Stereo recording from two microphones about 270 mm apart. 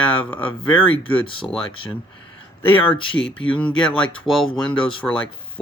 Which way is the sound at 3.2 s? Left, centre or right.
Centre.